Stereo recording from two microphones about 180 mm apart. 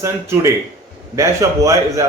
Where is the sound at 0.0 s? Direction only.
15° right (ahead or behind).